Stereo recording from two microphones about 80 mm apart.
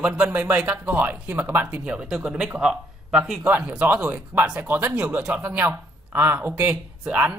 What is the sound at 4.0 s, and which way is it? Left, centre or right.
A man's voice, right.